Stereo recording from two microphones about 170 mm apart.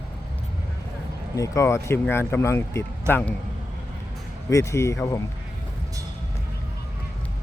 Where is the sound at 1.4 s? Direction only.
15° left (ahead or behind).